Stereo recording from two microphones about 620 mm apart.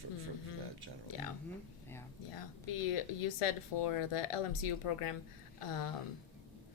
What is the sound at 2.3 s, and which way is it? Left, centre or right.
Speech, left.